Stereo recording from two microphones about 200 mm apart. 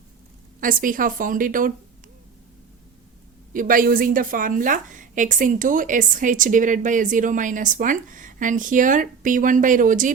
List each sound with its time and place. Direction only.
0.6 s a woman's voice: 45° right (ahead or behind)
3.5 s a woman's voice: 45° right (ahead or behind)